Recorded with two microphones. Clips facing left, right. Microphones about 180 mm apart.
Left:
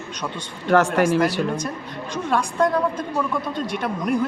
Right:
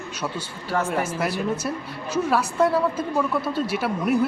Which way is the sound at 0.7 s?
80° left.